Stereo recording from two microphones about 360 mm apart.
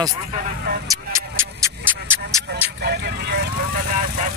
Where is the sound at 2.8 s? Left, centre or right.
Right.